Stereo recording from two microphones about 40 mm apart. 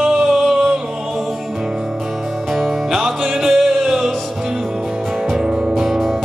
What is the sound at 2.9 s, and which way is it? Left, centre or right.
Music, centre.